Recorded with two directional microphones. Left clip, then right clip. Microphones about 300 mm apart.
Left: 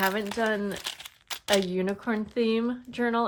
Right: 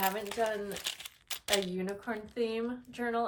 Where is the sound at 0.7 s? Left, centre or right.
Centre.